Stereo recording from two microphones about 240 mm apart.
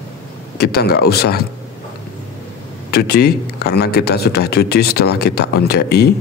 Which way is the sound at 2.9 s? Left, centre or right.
Left.